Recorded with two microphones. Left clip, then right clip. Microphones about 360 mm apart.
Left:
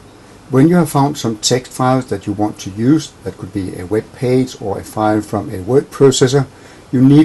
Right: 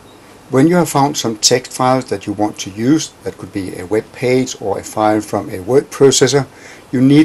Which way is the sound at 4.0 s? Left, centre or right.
Left.